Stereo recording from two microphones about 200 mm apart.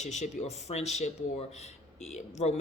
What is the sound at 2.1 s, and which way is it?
Speech, 35° left (ahead or behind).